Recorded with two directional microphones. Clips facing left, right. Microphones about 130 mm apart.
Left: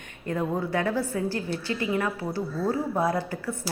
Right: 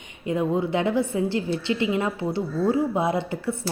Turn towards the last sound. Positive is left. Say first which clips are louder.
# right 4 dB
turn(degrees=-25)  # may be behind; listen again after turning